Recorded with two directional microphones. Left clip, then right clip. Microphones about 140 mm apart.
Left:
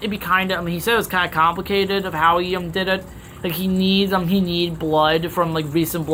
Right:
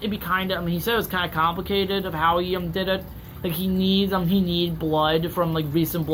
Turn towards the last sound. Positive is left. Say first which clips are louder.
# left 3 dB
turn(degrees=25)  # may be behind; listen again after turning